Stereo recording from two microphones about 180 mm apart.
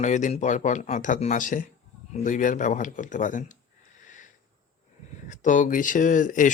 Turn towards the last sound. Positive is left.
turn(degrees=45)  # may be behind; listen again after turning